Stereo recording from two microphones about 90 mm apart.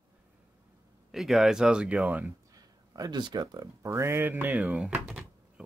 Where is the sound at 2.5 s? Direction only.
45° right (ahead or behind).